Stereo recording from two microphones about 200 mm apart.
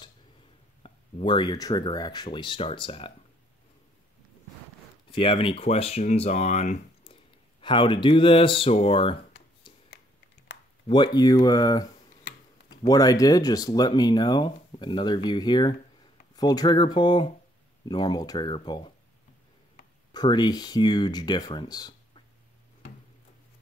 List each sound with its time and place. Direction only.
0.8 s speech: 25° left (ahead or behind)
5.1 s speech: 25° left (ahead or behind)
7.6 s speech: 25° left (ahead or behind)
10.9 s speech: 20° left (ahead or behind)
20.1 s speech: 20° left (ahead or behind)